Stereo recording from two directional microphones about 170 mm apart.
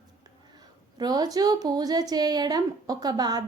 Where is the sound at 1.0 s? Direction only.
20° right (ahead or behind).